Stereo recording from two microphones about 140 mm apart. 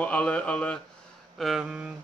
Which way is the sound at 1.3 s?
Centre (ahead or behind).